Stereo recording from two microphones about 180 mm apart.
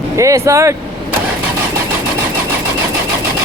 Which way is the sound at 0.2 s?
15° right (ahead or behind).